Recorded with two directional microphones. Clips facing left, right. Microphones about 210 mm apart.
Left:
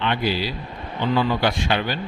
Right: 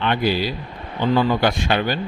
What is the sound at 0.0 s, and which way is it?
A man's voice, 45° right (ahead or behind).